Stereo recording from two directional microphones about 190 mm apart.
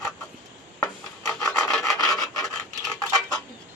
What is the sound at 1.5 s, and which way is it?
Rub, 5° left (ahead or behind).